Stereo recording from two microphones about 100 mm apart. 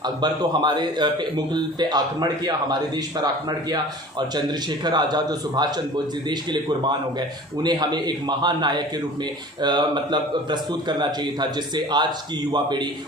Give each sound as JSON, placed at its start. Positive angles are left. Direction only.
{"t": 0.0, "sound": "a man's voice", "side_deg": -45}
{"t": 4.4, "sound": "a man's voice", "side_deg": -45}